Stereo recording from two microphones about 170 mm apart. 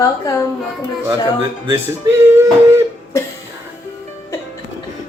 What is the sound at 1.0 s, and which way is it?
Speech, 15° right (ahead or behind).